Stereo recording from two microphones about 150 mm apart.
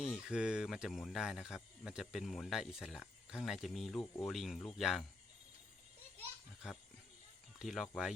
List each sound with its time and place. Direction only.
0.0 s speech: 5° right (ahead or behind)
7.6 s speech: centre (ahead or behind)